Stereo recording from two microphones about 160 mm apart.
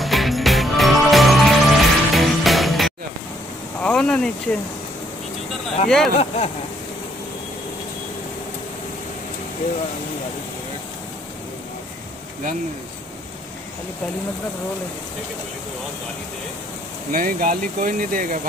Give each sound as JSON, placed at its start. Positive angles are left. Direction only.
{"t": 0.0, "sound": "music", "side_deg": 0}
{"t": 3.8, "sound": "speech", "side_deg": 5}
{"t": 5.9, "sound": "speech", "side_deg": 0}
{"t": 6.1, "sound": "speech", "side_deg": 40}
{"t": 17.1, "sound": "speech", "side_deg": -60}